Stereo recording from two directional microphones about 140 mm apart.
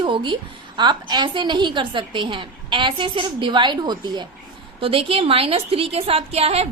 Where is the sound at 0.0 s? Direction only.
35° right (ahead or behind).